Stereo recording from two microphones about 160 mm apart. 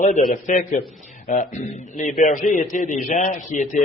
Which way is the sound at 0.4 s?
50° left (ahead or behind).